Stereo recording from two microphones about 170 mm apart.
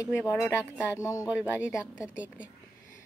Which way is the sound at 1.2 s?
10° right (ahead or behind).